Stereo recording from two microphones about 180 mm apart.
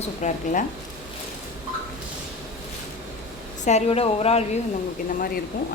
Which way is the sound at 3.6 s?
35° left (ahead or behind).